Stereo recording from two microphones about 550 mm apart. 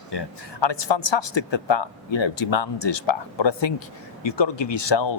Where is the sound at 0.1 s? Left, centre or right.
Left.